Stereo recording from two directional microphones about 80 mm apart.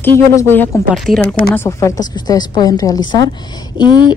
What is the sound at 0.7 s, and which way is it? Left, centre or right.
Speech, left.